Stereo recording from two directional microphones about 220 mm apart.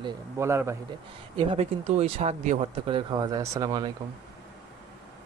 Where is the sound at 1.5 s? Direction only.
30° right (ahead or behind).